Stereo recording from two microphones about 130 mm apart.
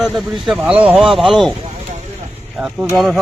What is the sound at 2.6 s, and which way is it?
Speech, 5° right (ahead or behind).